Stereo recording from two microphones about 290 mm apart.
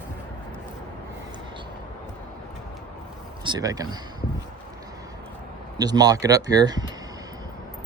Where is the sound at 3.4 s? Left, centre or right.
Centre.